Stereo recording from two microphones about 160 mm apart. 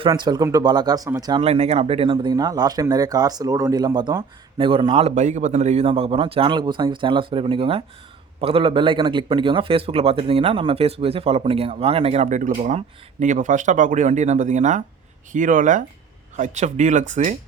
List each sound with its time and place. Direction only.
0.1 s speech: 25° right (ahead or behind)
1.4 s speech: 40° right (ahead or behind)